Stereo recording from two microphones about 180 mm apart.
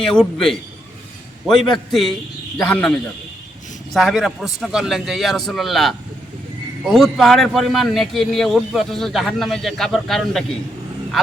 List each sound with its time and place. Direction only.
0.1 s a man's voice: 5° left (ahead or behind)